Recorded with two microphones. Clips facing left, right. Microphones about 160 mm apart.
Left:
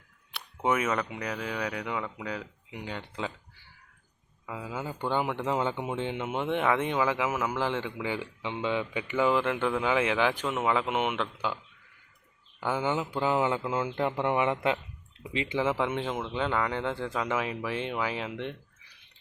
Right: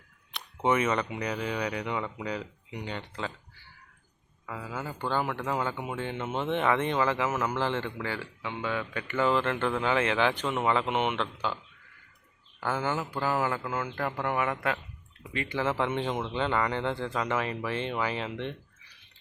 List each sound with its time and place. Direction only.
0.3 s speech: 5° left (ahead or behind)
4.4 s speech: 15° left (ahead or behind)
12.5 s speech: 15° left (ahead or behind)